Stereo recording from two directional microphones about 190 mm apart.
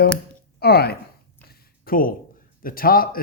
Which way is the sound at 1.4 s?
55° left (ahead or behind).